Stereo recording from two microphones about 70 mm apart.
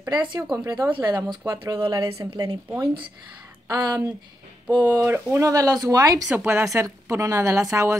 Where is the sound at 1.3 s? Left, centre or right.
Right.